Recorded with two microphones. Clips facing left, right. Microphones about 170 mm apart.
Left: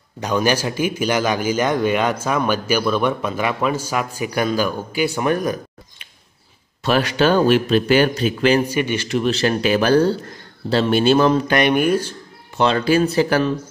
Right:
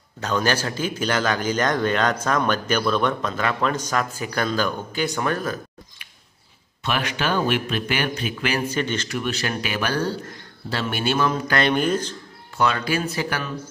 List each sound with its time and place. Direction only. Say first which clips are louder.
0.2 s a man's voice: left 4 dB; 15° left (ahead or behind)
6.8 s speech: left 8 dB; 35° left (ahead or behind)
8.6 s a man's voice: left 4 dB; 10° left (ahead or behind)
9.1 s a man's voice: left 8 dB; 30° left (ahead or behind)
11.5 s a man's voice: left 4 dB; 15° left (ahead or behind)
12.5 s speech: left 6 dB; 30° left (ahead or behind)